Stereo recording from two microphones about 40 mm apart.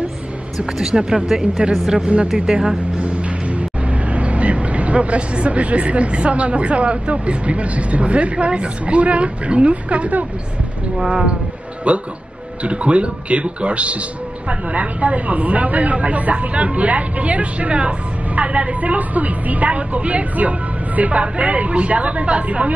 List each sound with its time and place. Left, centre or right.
0.9 s speech: centre
2.2 s speech: right
3.0 s music: right
4.1 s speech: right
11.1 s speech: right